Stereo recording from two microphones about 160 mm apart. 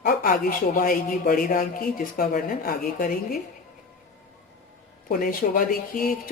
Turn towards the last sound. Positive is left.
turn(degrees=60)  # may be behind; listen again after turning